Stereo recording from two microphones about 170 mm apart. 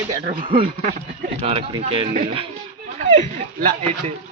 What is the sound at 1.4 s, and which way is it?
Speech, 35° right (ahead or behind).